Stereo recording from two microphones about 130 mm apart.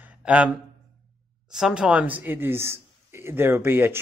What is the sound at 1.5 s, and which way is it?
Speech, 5° right (ahead or behind).